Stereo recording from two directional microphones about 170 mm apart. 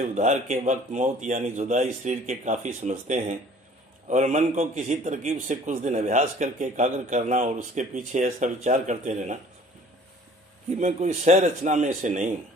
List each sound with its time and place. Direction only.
0.0 s a man's voice: 45° right (ahead or behind)
10.8 s a man's voice: 45° right (ahead or behind)